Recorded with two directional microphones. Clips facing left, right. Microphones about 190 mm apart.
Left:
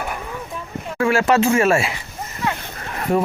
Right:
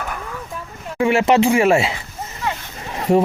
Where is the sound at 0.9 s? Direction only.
20° right (ahead or behind).